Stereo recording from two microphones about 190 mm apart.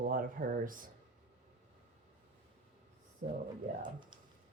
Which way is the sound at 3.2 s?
45° right (ahead or behind).